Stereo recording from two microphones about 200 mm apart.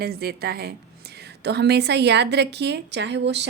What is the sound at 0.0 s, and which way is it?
A woman's voice, 50° right (ahead or behind).